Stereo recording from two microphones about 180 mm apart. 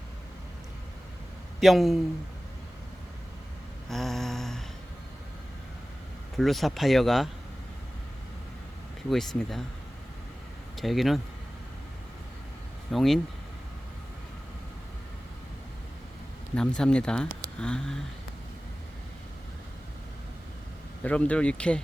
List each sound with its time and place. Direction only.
1.6 s speech: centre (ahead or behind)
3.8 s a sound: centre (ahead or behind)
6.3 s speech: centre (ahead or behind)
9.0 s speech: centre (ahead or behind)
10.8 s speech: centre (ahead or behind)
12.9 s speech: centre (ahead or behind)
16.6 s speech: 5° left (ahead or behind)
21.0 s speech: 5° left (ahead or behind)